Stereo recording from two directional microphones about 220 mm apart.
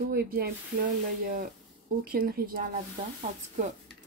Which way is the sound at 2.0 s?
40° right (ahead or behind).